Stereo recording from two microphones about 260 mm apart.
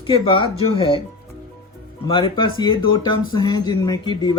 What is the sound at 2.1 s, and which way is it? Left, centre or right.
Speech, centre.